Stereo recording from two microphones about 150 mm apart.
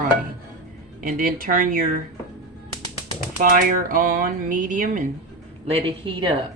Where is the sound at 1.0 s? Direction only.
65° right (ahead or behind).